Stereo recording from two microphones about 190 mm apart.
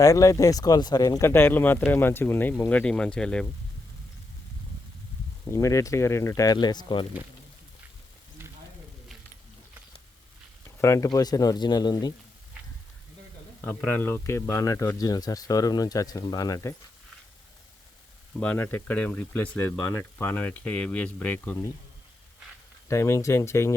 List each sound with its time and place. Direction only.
0.0 s speech: 15° left (ahead or behind)
5.5 s speech: 15° left (ahead or behind)
10.8 s speech: 15° left (ahead or behind)
13.7 s speech: 10° left (ahead or behind)
18.3 s speech: 10° left (ahead or behind)
22.9 s speech: 15° left (ahead or behind)